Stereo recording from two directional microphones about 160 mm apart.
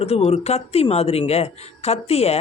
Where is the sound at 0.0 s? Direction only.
40° left (ahead or behind).